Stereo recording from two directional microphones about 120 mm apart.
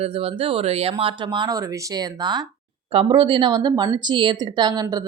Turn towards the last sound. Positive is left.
turn(degrees=-35)  # may be behind; listen again after turning